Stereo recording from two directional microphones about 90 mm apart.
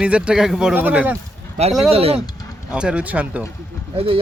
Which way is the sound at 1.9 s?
90° right.